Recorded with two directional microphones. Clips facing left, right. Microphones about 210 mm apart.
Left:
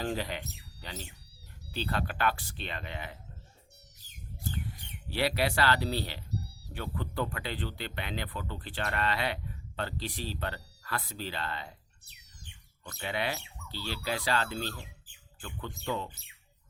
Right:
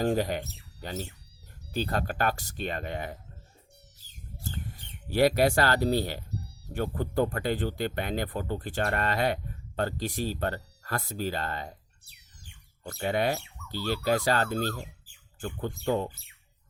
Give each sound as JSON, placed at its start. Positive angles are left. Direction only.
{"t": 0.0, "sound": "speech", "side_deg": -45}
{"t": 5.0, "sound": "speech", "side_deg": -45}
{"t": 12.8, "sound": "speech", "side_deg": -45}